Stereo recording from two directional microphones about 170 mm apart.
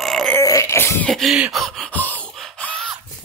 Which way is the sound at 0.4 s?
20° left (ahead or behind).